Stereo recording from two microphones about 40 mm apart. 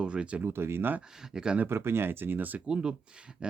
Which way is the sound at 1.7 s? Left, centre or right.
Right.